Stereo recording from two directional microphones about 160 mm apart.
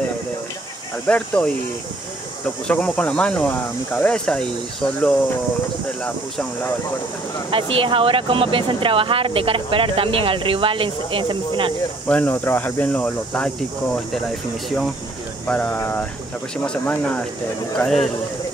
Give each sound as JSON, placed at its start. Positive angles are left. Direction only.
{"t": 1.0, "sound": "speech", "side_deg": 5}
{"t": 2.7, "sound": "speech", "side_deg": 5}
{"t": 7.5, "sound": "speech", "side_deg": -35}
{"t": 12.1, "sound": "speech", "side_deg": 10}
{"t": 15.4, "sound": "speech", "side_deg": 10}